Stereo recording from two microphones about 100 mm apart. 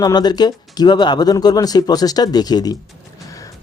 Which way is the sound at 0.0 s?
45° left (ahead or behind).